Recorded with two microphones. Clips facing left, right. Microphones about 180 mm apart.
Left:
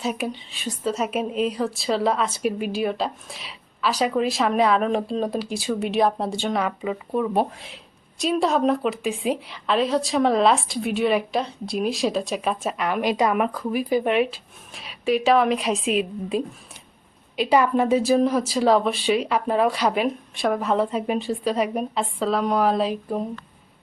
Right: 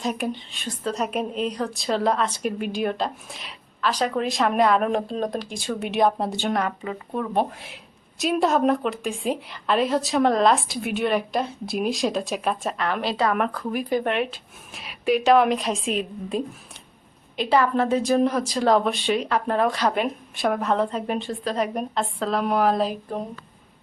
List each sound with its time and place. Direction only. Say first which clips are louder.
0.0 s a woman's voice: even; 5° left (ahead or behind)